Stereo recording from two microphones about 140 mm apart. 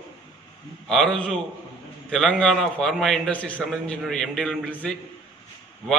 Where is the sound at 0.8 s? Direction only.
5° left (ahead or behind).